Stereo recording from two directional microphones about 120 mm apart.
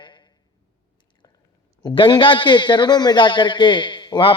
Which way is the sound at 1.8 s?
45° left (ahead or behind).